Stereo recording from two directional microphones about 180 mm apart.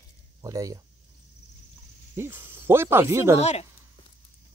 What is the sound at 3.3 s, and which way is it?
Speech, 35° left (ahead or behind).